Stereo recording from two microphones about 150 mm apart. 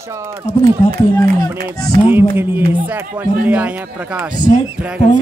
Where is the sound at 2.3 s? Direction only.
15° right (ahead or behind).